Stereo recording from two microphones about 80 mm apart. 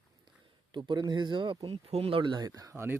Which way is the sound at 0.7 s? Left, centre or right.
Right.